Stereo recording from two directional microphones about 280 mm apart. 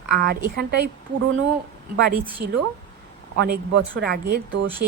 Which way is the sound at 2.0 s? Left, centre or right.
Right.